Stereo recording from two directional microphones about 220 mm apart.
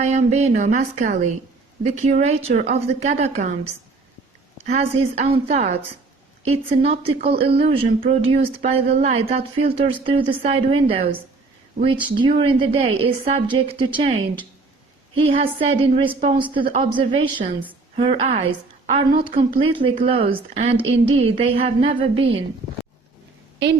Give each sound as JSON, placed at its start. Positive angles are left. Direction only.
{"t": 0.0, "sound": "a woman's voice", "side_deg": -30}
{"t": 4.6, "sound": "speech", "side_deg": -30}